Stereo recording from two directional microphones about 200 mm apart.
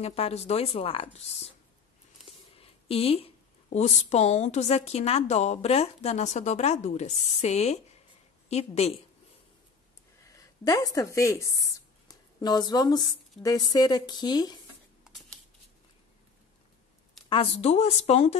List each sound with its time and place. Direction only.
0.0 s a woman's voice: 30° left (ahead or behind)
10.2 s a woman's voice: 15° left (ahead or behind)
17.3 s a woman's voice: 30° left (ahead or behind)